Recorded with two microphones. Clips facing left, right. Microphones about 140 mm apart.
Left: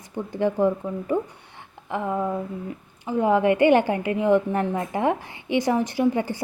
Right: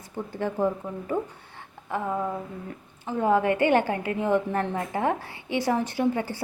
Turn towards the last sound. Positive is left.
turn(degrees=15)  # may be behind; listen again after turning